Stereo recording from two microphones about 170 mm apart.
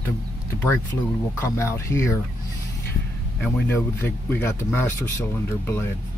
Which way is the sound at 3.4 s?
10° left (ahead or behind).